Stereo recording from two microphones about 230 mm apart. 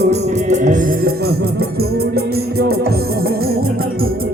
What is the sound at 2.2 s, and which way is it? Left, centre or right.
Music, right.